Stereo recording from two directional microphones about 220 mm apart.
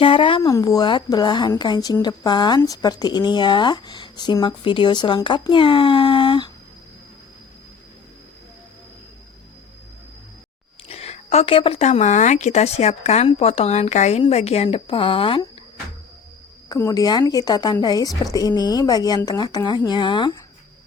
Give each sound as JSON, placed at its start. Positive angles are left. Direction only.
{"t": 0.0, "sound": "a woman's voice", "side_deg": 25}
{"t": 10.8, "sound": "a woman's voice", "side_deg": 30}
{"t": 16.6, "sound": "a woman's voice", "side_deg": 15}